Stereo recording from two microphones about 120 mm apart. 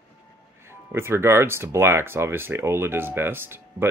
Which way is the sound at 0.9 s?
20° right (ahead or behind).